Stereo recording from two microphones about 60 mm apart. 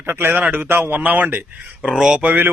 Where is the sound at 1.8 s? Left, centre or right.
Centre.